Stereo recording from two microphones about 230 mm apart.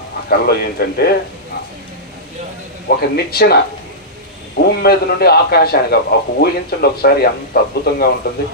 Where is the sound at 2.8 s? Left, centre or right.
Left.